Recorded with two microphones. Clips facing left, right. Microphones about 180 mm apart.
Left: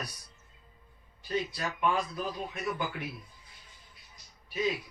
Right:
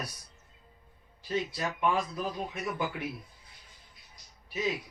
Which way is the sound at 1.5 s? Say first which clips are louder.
Right 2 dB; 25° right (ahead or behind).